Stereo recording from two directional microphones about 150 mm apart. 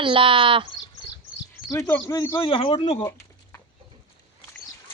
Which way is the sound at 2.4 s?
35° left (ahead or behind).